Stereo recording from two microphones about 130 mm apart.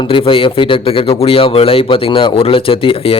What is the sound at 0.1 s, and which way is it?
A man's voice, 45° left (ahead or behind).